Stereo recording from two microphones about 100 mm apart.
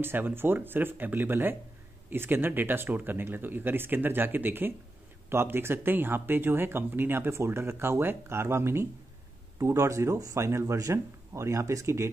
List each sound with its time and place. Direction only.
0.0 s a man's voice: 20° right (ahead or behind)